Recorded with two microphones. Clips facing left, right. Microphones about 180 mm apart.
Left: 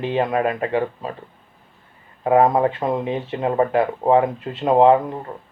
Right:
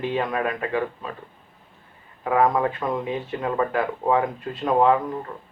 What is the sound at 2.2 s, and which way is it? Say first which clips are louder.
Speech: left 5 dB; 30° left (ahead or behind).